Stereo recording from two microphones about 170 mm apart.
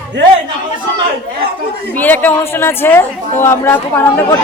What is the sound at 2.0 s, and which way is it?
Speech, 10° left (ahead or behind).